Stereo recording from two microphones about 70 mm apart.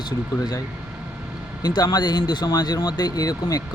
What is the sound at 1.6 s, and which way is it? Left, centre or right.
Speech, left.